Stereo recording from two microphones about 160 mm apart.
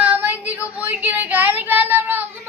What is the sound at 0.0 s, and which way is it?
Child singing, 10° right (ahead or behind).